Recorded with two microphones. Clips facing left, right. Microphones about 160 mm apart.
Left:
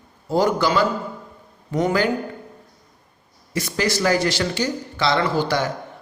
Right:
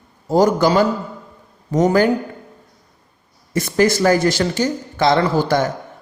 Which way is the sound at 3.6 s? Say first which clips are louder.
Right 7 dB; 50° right (ahead or behind).